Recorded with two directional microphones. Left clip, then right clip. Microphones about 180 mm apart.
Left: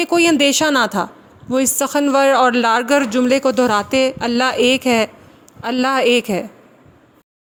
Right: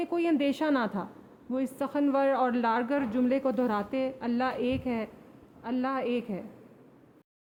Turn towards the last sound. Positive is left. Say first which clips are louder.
# left 17 dB
turn(degrees=50)  # may be behind; listen again after turning